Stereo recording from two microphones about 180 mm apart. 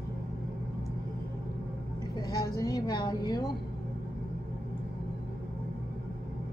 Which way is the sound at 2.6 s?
20° left (ahead or behind).